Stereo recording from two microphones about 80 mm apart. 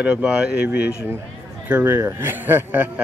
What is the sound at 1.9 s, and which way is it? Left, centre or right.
Speech, right.